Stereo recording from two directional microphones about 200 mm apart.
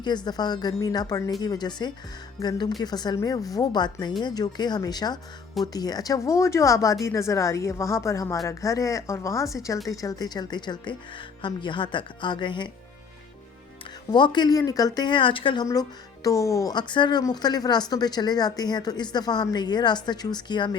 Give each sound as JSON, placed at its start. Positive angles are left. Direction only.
{"t": 0.0, "sound": "a woman's voice", "side_deg": 20}
{"t": 9.7, "sound": "speech", "side_deg": 0}
{"t": 10.0, "sound": "speech", "side_deg": 20}
{"t": 14.1, "sound": "speech", "side_deg": 20}